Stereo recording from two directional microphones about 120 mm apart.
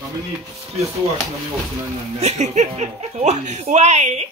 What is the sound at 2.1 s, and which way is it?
Speech, 70° right (ahead or behind).